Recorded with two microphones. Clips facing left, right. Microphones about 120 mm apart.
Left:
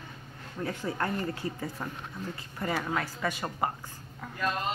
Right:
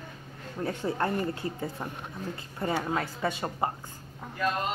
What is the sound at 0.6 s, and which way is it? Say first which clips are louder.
Speech: right 3 dB; 30° right (ahead or behind).